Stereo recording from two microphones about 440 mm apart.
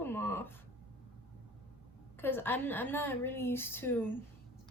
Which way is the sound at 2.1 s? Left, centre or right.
Centre.